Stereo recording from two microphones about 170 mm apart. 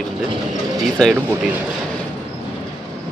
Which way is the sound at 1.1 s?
10° right (ahead or behind).